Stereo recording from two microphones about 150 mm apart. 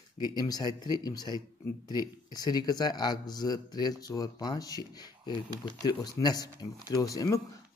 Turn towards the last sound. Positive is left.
turn(degrees=25)  # may be behind; listen again after turning